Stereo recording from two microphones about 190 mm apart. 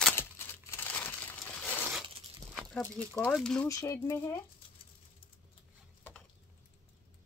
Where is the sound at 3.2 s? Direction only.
Centre (ahead or behind).